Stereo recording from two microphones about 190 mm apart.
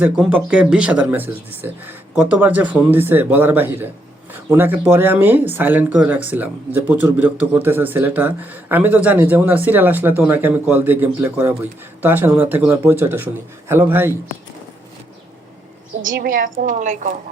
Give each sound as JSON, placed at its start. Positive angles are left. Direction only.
{"t": 0.0, "sound": "speech", "side_deg": -5}
{"t": 16.1, "sound": "a woman's voice", "side_deg": -50}